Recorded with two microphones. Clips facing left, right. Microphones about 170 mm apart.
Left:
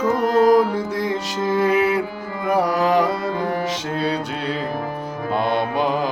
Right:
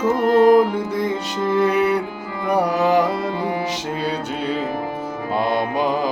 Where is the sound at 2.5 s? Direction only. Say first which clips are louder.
Right 1 dB; centre (ahead or behind).